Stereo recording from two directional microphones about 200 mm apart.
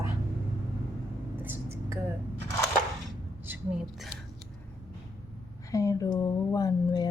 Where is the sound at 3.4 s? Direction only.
5° right (ahead or behind).